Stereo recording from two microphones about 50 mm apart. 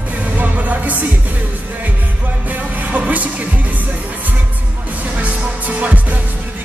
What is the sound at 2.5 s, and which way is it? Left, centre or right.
Music, right.